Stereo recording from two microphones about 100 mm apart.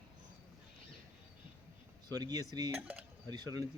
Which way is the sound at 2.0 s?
40° right (ahead or behind).